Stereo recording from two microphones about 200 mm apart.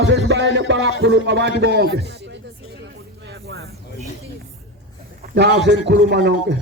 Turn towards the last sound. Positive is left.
turn(degrees=-55)  # may be behind; listen again after turning